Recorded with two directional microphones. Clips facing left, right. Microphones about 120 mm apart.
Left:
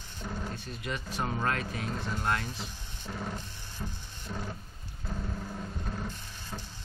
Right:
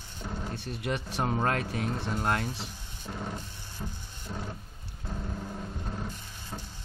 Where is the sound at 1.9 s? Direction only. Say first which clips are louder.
Right 3 dB; 20° right (ahead or behind).